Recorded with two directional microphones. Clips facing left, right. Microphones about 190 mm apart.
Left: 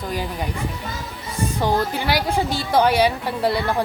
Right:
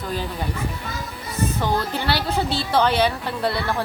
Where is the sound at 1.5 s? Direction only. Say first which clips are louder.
Left 5 dB; 10° left (ahead or behind).